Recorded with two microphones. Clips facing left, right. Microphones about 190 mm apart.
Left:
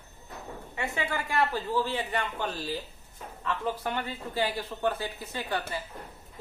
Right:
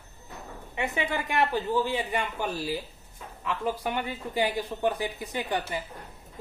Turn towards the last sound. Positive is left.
turn(degrees=-15)  # may be behind; listen again after turning